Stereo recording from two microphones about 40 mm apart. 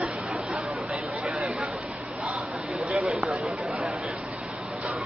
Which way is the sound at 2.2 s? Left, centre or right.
Right.